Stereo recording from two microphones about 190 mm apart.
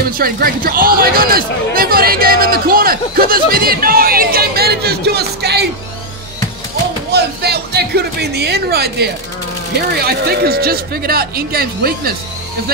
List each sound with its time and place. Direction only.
0.2 s speech: 50° right (ahead or behind)
7.1 s speech: 60° right (ahead or behind)